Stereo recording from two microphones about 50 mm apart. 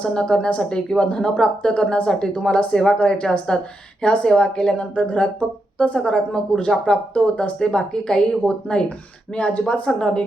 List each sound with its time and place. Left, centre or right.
0.0 s a woman's voice: centre